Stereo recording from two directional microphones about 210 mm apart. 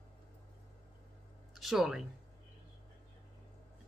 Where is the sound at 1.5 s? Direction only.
Centre (ahead or behind).